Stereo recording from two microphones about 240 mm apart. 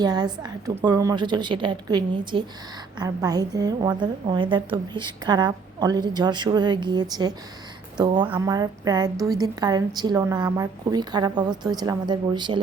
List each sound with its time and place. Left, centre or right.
0.0 s a woman's voice: centre